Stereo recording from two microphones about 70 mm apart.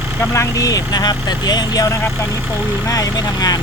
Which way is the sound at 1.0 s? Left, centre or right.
Left.